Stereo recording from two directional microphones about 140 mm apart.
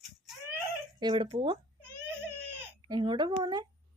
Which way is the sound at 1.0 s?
35° right (ahead or behind).